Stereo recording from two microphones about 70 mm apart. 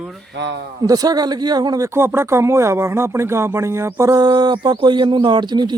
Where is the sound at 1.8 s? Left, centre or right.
Right.